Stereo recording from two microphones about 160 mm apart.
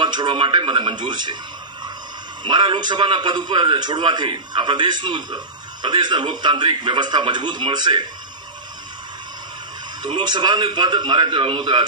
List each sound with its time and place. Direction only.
0.0 s a man's voice: 30° right (ahead or behind)
2.4 s a man's voice: 30° right (ahead or behind)
10.0 s a man's voice: 30° right (ahead or behind)